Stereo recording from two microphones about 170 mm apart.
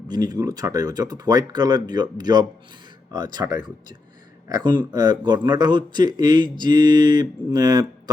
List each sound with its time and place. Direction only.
0.1 s a man's voice: 20° right (ahead or behind)